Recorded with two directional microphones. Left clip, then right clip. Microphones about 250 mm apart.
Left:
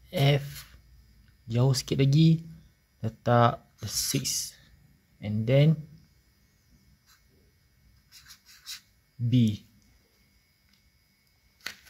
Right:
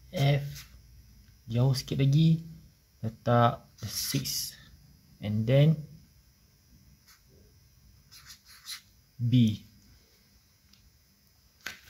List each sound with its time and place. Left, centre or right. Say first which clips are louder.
0.1 s a sound: left 4 dB; left
1.5 s speech: left 4 dB; centre
9.3 s speech: even; centre